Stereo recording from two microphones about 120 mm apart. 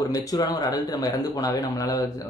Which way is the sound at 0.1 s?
30° left (ahead or behind).